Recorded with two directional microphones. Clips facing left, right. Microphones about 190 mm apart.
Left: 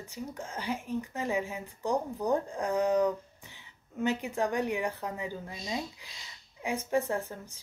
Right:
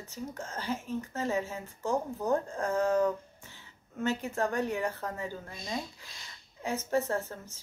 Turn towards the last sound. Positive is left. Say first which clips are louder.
# even
turn(degrees=15)  # may be behind; listen again after turning